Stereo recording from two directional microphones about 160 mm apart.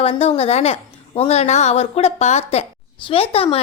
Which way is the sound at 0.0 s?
40° left (ahead or behind).